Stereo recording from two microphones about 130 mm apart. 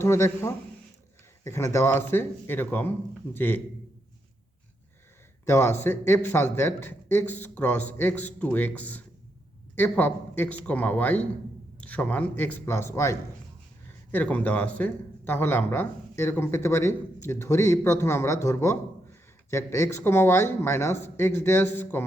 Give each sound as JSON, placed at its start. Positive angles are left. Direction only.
{"t": 0.0, "sound": "speech", "side_deg": 20}
{"t": 5.5, "sound": "speech", "side_deg": 20}